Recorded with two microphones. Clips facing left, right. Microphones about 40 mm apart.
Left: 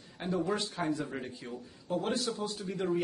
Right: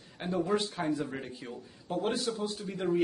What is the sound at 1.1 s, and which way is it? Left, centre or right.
Speech, centre.